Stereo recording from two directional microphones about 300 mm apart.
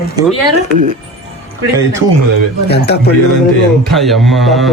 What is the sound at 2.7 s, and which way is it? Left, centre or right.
Speech, left.